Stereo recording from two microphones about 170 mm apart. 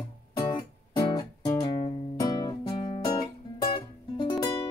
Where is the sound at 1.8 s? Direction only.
30° left (ahead or behind).